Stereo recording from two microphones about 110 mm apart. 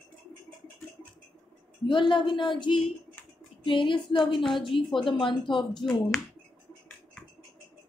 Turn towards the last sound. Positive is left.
turn(degrees=5)  # may be behind; listen again after turning